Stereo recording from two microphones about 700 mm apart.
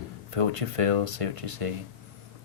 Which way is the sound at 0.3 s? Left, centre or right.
Right.